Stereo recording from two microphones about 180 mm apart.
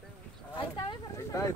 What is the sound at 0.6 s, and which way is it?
Speech, 25° left (ahead or behind).